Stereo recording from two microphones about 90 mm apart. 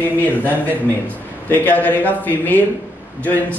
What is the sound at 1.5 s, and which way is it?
A man's voice, 20° left (ahead or behind).